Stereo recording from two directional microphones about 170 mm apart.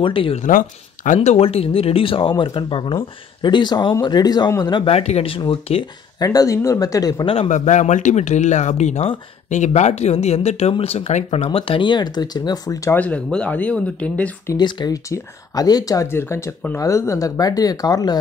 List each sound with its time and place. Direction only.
0.0 s speech: 30° left (ahead or behind)
0.4 s speech: 50° left (ahead or behind); by 7.3 s 20° left (ahead or behind)
7.3 s speech: 45° left (ahead or behind); by 13.0 s 20° left (ahead or behind)
13.0 s speech: 5° left (ahead or behind); by 18.2 s 20° left (ahead or behind)